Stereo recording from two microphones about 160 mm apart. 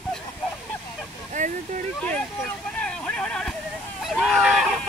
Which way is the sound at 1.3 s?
50° right (ahead or behind).